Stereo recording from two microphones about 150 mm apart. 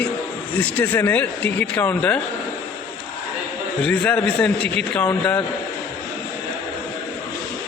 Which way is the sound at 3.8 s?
10° left (ahead or behind).